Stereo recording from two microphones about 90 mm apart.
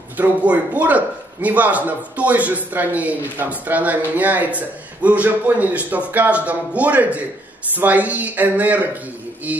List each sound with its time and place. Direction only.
0.2 s a man's voice: 15° right (ahead or behind)
9.5 s music: 15° right (ahead or behind)